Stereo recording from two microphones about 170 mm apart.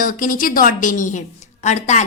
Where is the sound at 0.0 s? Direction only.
50° left (ahead or behind).